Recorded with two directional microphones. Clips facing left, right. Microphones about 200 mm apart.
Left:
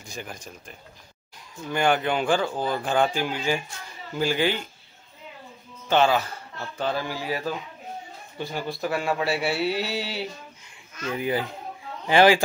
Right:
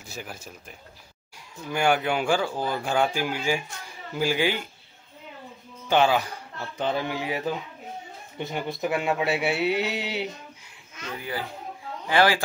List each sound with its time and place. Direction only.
0.0 s speech: 5° right (ahead or behind)
5.9 s speech: 15° right (ahead or behind)
11.1 s speech: 20° left (ahead or behind)